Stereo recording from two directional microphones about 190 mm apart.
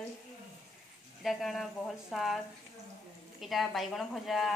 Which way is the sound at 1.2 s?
Centre (ahead or behind).